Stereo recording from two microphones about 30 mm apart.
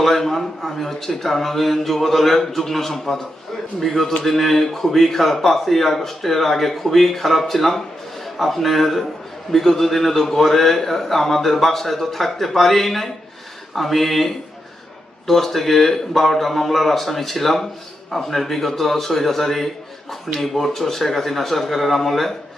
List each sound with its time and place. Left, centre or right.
0.0 s speech: centre